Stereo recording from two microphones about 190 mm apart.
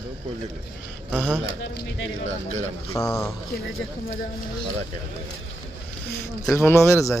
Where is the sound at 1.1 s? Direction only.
10° right (ahead or behind).